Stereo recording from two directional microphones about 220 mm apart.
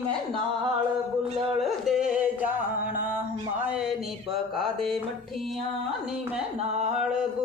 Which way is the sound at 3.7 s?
5° right (ahead or behind).